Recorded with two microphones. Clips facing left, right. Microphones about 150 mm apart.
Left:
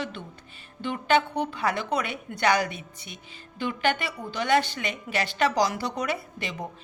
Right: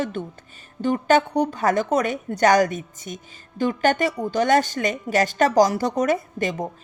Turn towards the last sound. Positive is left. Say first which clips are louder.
# right 9 dB
turn(degrees=-45)  # may be behind; listen again after turning